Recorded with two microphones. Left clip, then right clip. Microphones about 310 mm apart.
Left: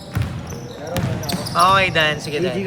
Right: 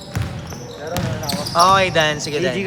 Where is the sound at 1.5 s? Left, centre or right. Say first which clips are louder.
Right 1 dB; centre.